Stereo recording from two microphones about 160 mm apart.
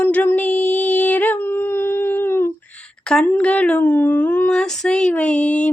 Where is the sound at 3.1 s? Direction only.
5° left (ahead or behind).